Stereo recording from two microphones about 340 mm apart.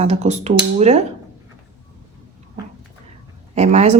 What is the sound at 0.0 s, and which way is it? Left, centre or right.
Speech, centre.